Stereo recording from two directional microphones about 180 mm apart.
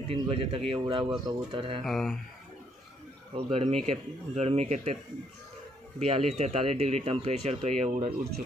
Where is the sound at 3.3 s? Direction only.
30° right (ahead or behind).